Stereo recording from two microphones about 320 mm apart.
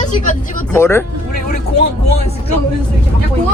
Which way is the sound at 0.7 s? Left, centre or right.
Centre.